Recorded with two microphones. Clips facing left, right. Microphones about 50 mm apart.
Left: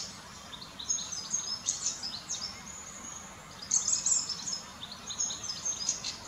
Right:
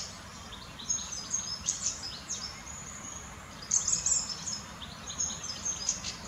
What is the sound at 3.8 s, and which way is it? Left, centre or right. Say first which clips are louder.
Bird: even; right.